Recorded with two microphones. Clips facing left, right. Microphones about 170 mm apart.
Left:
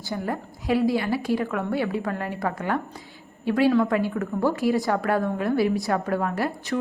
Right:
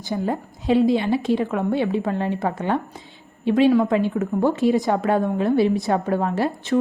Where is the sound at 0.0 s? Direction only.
20° right (ahead or behind).